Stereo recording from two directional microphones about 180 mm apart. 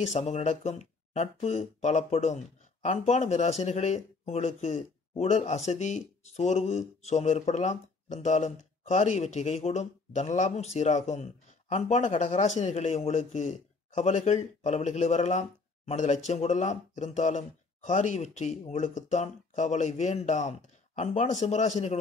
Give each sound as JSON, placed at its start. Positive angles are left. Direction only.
{"t": 0.0, "sound": "speech", "side_deg": 40}